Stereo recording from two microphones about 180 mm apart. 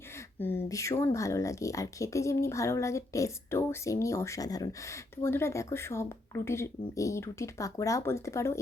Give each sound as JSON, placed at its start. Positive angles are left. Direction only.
{"t": 0.3, "sound": "speech", "side_deg": 10}